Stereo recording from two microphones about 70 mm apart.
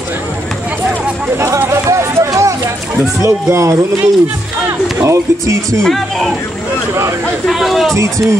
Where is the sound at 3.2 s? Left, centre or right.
Right.